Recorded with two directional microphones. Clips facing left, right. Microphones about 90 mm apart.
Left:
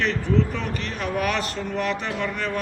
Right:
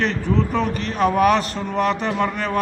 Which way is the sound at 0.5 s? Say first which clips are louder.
Right 8 dB; 35° right (ahead or behind).